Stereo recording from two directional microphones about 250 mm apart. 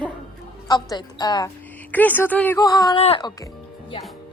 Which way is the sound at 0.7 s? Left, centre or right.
Centre.